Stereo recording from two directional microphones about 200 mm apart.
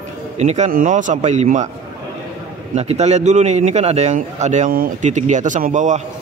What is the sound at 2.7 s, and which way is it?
A man's voice, 35° right (ahead or behind).